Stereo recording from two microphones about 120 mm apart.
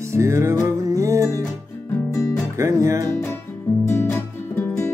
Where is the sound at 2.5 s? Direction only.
25° right (ahead or behind).